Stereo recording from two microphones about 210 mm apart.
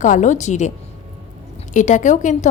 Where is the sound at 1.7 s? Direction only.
35° left (ahead or behind).